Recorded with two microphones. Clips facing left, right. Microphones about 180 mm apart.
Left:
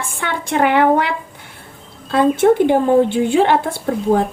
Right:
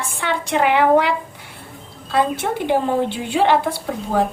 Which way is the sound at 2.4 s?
50° left (ahead or behind).